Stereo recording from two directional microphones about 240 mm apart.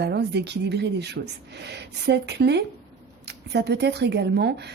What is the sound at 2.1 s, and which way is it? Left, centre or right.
Speech, right.